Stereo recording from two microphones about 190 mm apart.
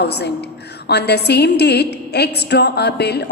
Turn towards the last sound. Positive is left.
turn(degrees=60)  # may be behind; listen again after turning